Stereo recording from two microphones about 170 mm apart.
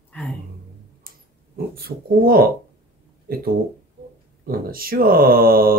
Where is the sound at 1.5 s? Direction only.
60° right (ahead or behind).